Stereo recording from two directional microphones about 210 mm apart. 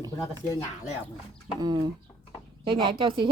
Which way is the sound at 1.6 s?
20° right (ahead or behind).